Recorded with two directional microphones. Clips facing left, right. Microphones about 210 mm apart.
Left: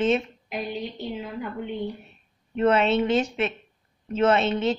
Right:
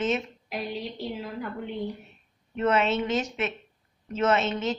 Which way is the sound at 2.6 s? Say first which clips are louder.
Left 4 dB; 30° left (ahead or behind).